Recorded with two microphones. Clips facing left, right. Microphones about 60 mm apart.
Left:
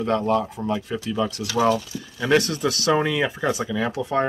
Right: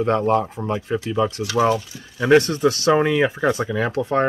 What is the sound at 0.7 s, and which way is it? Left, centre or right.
Speech, right.